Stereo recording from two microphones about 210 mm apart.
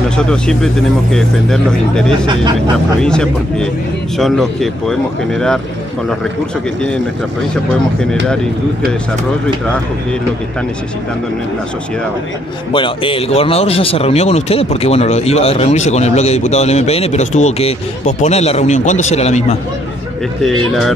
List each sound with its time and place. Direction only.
0.2 s speech: 5° left (ahead or behind)
12.7 s a man's voice: 25° left (ahead or behind)
20.4 s speech: centre (ahead or behind)